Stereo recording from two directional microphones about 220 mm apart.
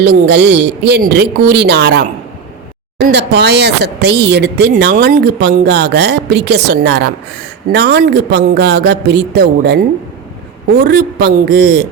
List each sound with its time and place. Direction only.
0.0 s speech: 50° right (ahead or behind)